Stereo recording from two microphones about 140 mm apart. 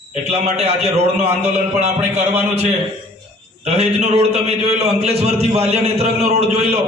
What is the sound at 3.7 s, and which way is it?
A man's voice, 50° right (ahead or behind).